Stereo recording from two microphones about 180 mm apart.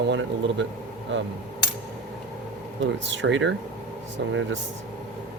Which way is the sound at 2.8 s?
90° right.